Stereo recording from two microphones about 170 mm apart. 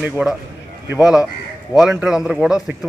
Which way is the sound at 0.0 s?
5° right (ahead or behind).